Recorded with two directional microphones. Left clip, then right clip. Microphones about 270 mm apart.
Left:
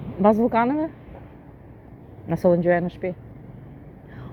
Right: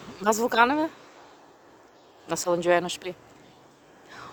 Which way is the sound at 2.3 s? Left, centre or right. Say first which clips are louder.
Left 4 dB; centre.